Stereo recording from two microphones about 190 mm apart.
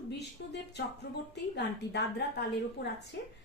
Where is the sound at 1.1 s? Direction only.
55° left (ahead or behind).